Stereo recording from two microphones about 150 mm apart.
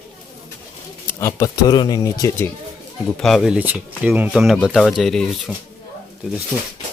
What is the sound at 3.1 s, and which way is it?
Speech, centre (ahead or behind).